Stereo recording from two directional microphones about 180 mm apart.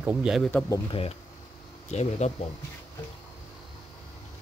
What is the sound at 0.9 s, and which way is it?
Speech, 30° left (ahead or behind).